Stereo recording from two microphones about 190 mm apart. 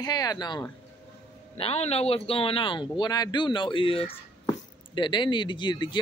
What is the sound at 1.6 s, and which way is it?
Speech, 30° left (ahead or behind).